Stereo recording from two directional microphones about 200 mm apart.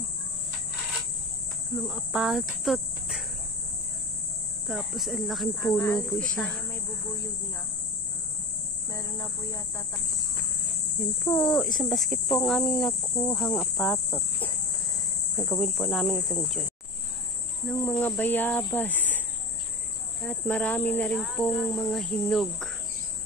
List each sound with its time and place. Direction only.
1.8 s speech: centre (ahead or behind)
4.6 s speech: centre (ahead or behind)
8.9 s speech: 15° left (ahead or behind)
11.2 s speech: 5° left (ahead or behind)
17.6 s speech: 10° left (ahead or behind)